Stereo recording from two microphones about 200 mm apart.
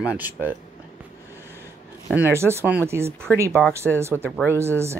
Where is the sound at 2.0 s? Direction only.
10° right (ahead or behind).